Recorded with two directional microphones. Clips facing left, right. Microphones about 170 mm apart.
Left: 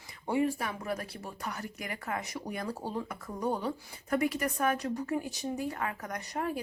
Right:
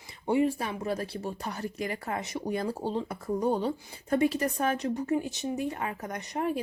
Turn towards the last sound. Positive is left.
turn(degrees=-20)  # may be behind; listen again after turning